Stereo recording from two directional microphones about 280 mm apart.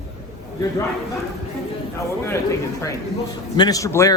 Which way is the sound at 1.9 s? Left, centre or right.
Centre.